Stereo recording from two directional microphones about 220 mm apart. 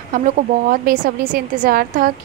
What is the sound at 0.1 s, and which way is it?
A woman's voice, 35° right (ahead or behind).